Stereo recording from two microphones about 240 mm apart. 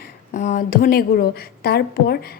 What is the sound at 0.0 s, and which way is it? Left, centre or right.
A woman's voice, left.